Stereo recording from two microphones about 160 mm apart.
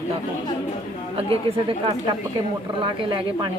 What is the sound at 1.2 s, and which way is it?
Speech, 35° right (ahead or behind).